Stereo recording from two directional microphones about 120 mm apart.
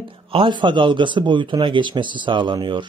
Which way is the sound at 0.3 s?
45° right (ahead or behind).